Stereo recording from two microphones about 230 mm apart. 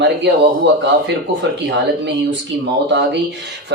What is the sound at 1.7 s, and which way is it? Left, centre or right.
Speech, right.